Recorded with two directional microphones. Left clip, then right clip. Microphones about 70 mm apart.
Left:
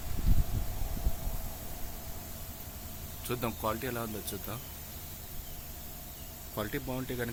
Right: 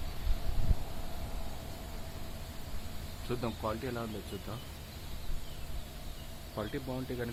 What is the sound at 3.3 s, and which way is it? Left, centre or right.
Speech, left.